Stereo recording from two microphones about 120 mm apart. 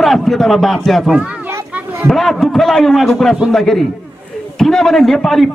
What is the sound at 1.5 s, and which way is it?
Children playing, 20° right (ahead or behind).